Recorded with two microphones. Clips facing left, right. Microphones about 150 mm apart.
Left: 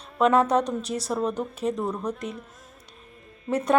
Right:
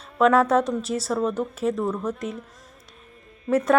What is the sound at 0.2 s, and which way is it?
Speech, 5° right (ahead or behind).